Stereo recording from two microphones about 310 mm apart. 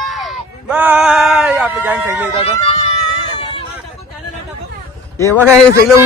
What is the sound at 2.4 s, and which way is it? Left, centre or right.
Speech, centre.